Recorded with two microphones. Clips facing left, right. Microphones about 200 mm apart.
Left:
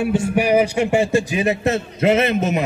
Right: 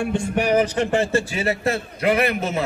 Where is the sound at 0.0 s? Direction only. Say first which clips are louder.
Left 3 dB; 5° left (ahead or behind).